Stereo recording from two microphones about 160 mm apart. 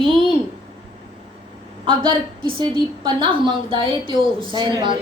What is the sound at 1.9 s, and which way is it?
A woman's voice, 30° right (ahead or behind).